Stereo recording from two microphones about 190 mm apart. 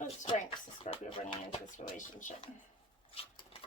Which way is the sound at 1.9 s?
40° left (ahead or behind).